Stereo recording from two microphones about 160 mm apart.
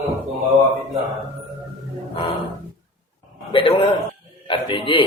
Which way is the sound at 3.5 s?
35° left (ahead or behind).